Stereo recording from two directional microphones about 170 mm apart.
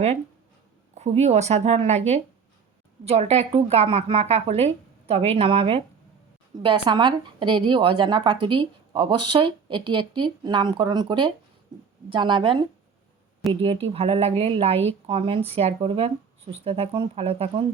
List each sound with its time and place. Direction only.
0.9 s a woman's voice: 40° right (ahead or behind)